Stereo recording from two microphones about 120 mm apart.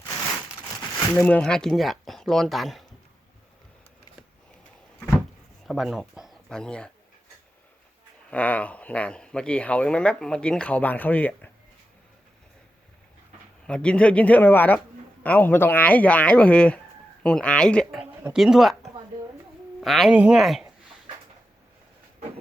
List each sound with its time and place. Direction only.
0.9 s speech: 15° left (ahead or behind)
5.6 s speech: centre (ahead or behind)
8.3 s speech: 10° left (ahead or behind)
13.7 s speech: 10° left (ahead or behind)
18.0 s a sound: 20° right (ahead or behind)
18.3 s speech: 5° right (ahead or behind)